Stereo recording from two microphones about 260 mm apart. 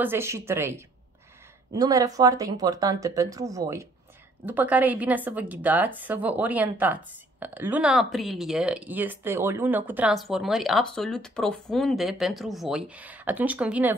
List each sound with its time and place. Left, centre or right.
0.0 s a woman's voice: centre